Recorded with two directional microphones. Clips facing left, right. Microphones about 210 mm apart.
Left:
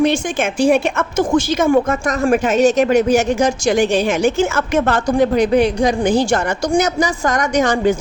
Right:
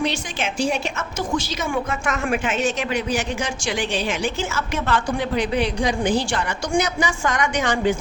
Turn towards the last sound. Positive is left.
turn(degrees=40)  # may be behind; listen again after turning